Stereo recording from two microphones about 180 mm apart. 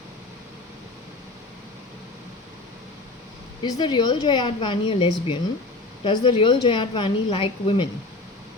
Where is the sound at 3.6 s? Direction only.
25° left (ahead or behind).